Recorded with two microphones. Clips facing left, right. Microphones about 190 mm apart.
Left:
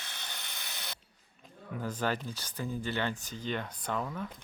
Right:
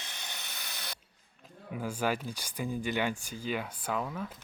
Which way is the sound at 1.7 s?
10° right (ahead or behind).